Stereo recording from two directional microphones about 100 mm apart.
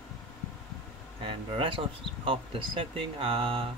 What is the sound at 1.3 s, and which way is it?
Speech, 60° right (ahead or behind).